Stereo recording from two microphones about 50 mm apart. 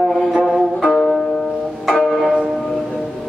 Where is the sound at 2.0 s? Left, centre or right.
Centre.